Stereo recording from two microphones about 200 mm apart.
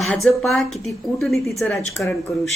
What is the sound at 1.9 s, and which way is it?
Speech, 15° left (ahead or behind).